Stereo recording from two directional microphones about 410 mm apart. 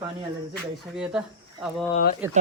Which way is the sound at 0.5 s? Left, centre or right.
Centre.